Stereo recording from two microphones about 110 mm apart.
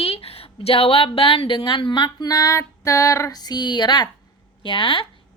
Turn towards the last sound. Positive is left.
turn(degrees=55)  # may be behind; listen again after turning